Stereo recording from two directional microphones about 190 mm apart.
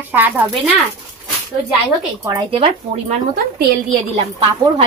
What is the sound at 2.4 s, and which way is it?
Speech, 30° right (ahead or behind).